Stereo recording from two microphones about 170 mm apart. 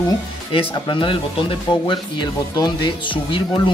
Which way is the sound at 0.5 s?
30° left (ahead or behind).